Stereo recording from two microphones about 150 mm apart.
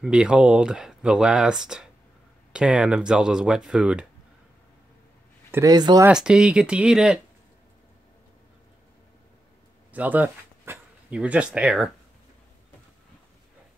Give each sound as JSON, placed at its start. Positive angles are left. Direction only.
{"t": 0.0, "sound": "speech", "side_deg": -5}
{"t": 5.5, "sound": "speech", "side_deg": -25}
{"t": 6.0, "sound": "speech", "side_deg": -5}
{"t": 9.9, "sound": "speech", "side_deg": -10}